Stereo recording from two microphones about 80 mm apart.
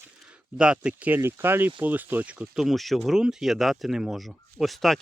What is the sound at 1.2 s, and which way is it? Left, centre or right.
Speech, right.